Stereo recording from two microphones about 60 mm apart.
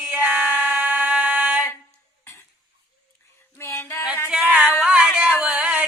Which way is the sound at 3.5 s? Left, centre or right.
Left.